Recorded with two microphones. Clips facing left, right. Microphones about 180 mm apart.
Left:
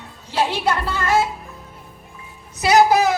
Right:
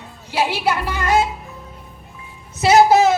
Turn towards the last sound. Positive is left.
turn(degrees=-25)  # may be behind; listen again after turning